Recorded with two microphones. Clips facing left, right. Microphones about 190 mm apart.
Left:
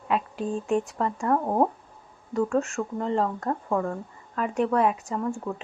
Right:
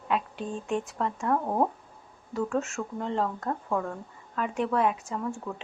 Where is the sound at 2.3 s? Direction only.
5° right (ahead or behind).